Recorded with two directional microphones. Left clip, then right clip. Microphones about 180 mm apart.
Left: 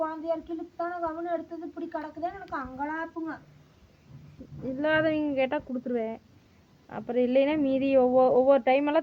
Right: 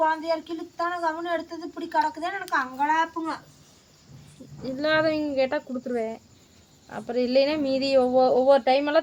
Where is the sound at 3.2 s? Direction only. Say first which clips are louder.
Right 5 dB; 45° right (ahead or behind).